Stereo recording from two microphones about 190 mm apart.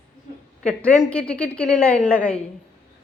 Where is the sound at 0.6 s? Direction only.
5° left (ahead or behind).